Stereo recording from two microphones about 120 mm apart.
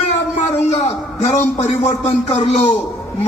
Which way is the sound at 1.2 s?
70° left (ahead or behind).